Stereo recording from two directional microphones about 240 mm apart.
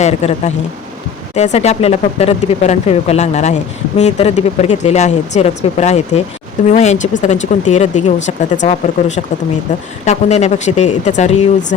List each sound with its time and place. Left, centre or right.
0.0 s speech: left